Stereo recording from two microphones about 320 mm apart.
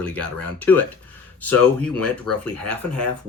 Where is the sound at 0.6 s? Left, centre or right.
Centre.